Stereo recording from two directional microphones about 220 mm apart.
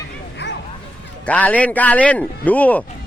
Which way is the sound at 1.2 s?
5° left (ahead or behind).